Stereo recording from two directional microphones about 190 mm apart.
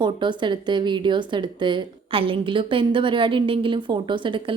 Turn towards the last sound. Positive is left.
turn(degrees=-25)  # may be behind; listen again after turning